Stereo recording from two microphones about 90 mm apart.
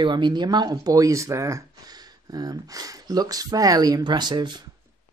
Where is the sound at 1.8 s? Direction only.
45° right (ahead or behind).